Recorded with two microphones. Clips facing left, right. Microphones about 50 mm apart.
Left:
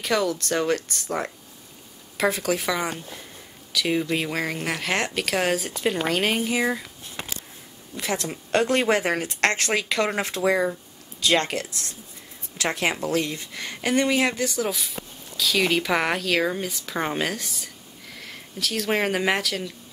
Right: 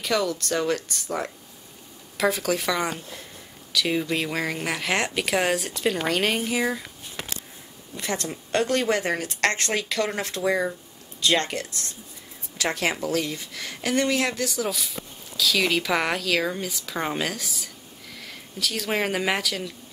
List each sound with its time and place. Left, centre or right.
0.0 s speech: centre
0.7 s speech: centre
2.1 s speech: centre
7.9 s speech: centre
8.3 s speech: centre
10.5 s speech: centre
12.9 s speech: centre